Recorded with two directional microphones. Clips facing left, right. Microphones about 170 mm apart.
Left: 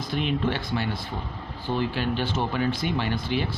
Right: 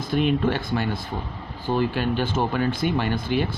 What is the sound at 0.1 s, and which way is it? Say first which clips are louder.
Speech: right 5 dB; 50° right (ahead or behind).